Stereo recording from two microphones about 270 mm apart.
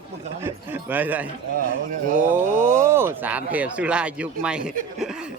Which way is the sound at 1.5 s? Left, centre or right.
Right.